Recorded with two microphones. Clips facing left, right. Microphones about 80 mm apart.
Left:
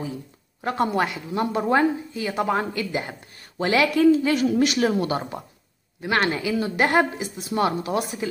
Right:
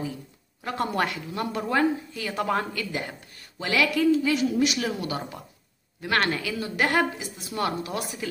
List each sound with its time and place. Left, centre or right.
0.9 s speech: centre
1.3 s a woman's voice: left
3.5 s speech: left
6.0 s a woman's voice: centre